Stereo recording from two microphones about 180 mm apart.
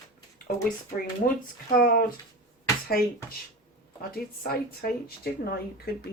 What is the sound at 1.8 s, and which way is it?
Speech, 55° left (ahead or behind).